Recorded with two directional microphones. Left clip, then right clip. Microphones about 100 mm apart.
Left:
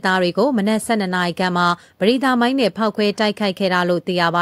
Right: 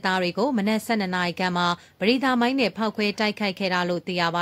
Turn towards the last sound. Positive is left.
turn(degrees=40)  # may be behind; listen again after turning